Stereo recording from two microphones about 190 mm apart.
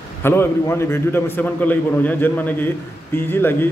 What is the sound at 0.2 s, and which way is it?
Speech, 10° left (ahead or behind).